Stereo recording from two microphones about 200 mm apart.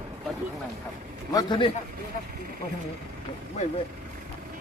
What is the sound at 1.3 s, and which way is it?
Speech, 25° left (ahead or behind).